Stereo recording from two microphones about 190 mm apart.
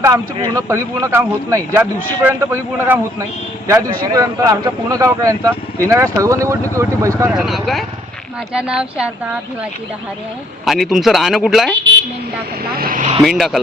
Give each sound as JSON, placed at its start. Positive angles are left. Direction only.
{"t": 0.3, "sound": "speech", "side_deg": -20}
{"t": 7.3, "sound": "speech", "side_deg": 0}
{"t": 10.7, "sound": "speech", "side_deg": 0}
{"t": 12.6, "sound": "speech", "side_deg": -50}
{"t": 13.2, "sound": "speech", "side_deg": 0}